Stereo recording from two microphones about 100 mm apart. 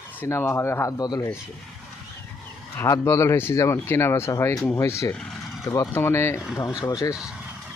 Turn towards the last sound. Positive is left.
turn(degrees=35)  # may be behind; listen again after turning